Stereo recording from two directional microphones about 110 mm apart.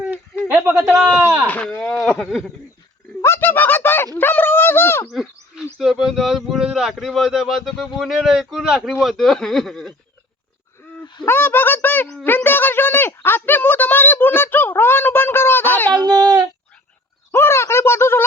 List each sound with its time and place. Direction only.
0.0 s a sound: 15° right (ahead or behind)
0.8 s speech: centre (ahead or behind)
1.5 s speech: 15° left (ahead or behind)
3.2 s a sound: 25° left (ahead or behind)
5.7 s speech: centre (ahead or behind)
11.3 s speech: 20° left (ahead or behind)
15.9 s speech: 40° right (ahead or behind)
17.3 s speech: 25° left (ahead or behind)